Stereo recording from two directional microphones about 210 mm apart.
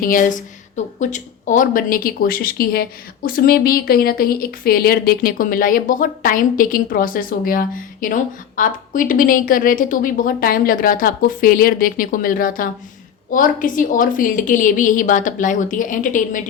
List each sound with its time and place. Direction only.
0.0 s a woman's voice: 40° left (ahead or behind)